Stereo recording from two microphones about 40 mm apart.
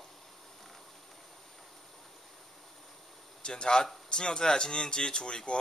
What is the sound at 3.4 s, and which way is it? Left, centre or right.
Speech, left.